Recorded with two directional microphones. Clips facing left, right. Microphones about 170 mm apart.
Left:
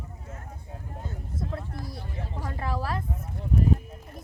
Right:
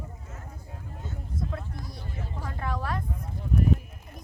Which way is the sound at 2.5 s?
5° left (ahead or behind).